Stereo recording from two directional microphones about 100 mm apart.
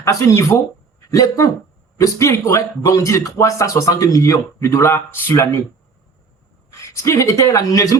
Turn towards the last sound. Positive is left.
turn(degrees=35)  # may be behind; listen again after turning